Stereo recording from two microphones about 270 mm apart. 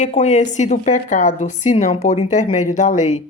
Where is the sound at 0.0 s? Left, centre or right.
Left.